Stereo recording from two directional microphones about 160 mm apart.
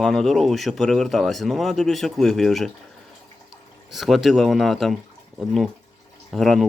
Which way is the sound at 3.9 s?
Centre (ahead or behind).